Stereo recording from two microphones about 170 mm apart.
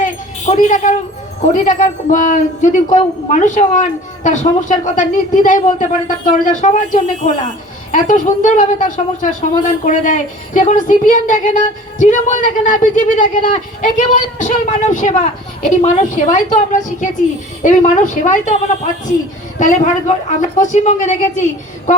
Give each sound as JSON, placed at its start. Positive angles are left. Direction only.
{"t": 0.0, "sound": "a sound", "side_deg": 50}
{"t": 1.5, "sound": "a woman's voice", "side_deg": 50}
{"t": 19.5, "sound": "a woman's voice", "side_deg": 45}